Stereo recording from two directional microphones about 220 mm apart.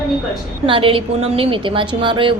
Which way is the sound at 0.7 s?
25° right (ahead or behind).